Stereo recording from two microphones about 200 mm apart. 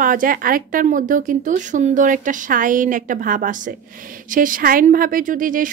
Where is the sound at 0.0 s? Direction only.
45° right (ahead or behind).